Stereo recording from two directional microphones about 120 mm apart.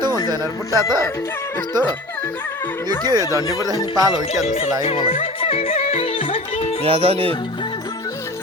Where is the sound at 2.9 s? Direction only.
35° right (ahead or behind).